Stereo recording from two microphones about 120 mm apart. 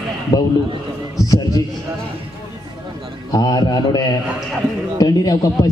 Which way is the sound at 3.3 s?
30° left (ahead or behind).